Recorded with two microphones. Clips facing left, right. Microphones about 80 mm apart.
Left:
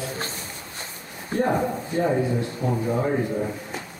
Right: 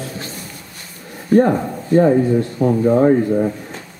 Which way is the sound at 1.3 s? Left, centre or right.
Left.